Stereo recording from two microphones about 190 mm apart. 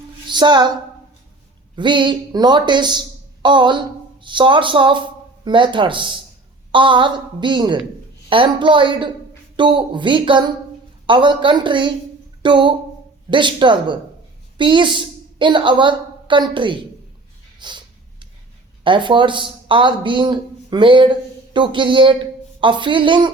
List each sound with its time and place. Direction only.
0.3 s a woman's voice: 25° right (ahead or behind)
12.4 s a sound: 25° right (ahead or behind)
13.3 s a woman's voice: 25° right (ahead or behind)
17.6 s snort: 25° right (ahead or behind)
18.8 s a woman's voice: 25° right (ahead or behind)